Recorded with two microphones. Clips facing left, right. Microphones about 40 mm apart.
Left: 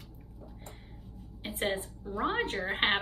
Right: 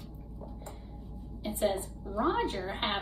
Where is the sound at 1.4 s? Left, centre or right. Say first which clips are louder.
Right 2 dB; left.